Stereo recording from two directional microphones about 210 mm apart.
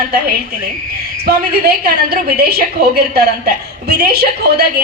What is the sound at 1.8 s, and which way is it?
Speech, 45° right (ahead or behind).